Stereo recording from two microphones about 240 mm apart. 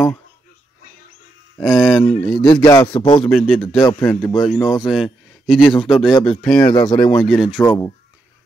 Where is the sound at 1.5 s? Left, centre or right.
Centre.